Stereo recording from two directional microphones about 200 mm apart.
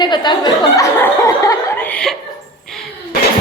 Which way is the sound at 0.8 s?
15° left (ahead or behind).